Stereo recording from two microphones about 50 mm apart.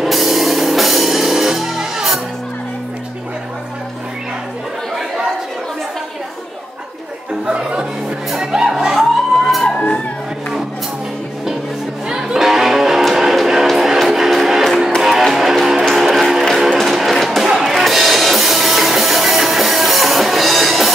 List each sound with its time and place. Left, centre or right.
0.0 s music: centre
4.9 s chatter: centre
7.4 s music: right
8.7 s music: centre
9.7 s music: left
12.1 s music: centre